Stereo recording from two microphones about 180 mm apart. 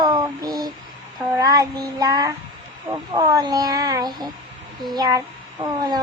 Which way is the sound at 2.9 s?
15° right (ahead or behind).